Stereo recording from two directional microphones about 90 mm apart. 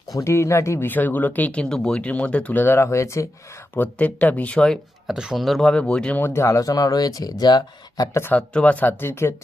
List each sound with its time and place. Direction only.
0.2 s speech: 30° left (ahead or behind)
3.8 s speech: 15° left (ahead or behind)
5.0 s speech: 5° right (ahead or behind); by 8.1 s 50° left (ahead or behind)
8.3 s speech: 15° left (ahead or behind)